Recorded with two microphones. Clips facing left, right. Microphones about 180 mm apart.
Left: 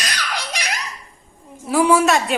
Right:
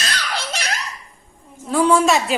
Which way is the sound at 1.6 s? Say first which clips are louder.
Even; 10° left (ahead or behind).